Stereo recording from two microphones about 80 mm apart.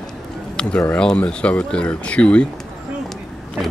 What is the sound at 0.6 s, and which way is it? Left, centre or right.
Speech, centre.